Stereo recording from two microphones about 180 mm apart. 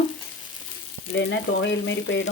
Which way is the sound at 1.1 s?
90° left.